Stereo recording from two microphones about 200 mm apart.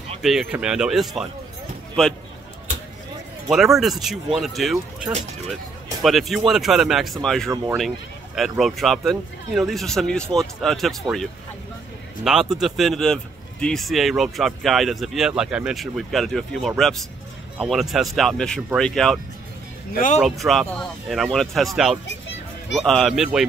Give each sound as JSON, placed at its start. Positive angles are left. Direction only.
{"t": 0.2, "sound": "speech", "side_deg": 0}
{"t": 3.4, "sound": "speech", "side_deg": 0}
{"t": 12.3, "sound": "speech", "side_deg": 0}
{"t": 19.9, "sound": "speech", "side_deg": 40}
{"t": 20.2, "sound": "speech", "side_deg": 0}